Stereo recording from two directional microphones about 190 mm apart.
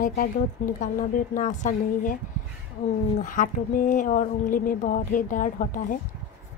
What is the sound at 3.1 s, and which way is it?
Speech, 45° left (ahead or behind).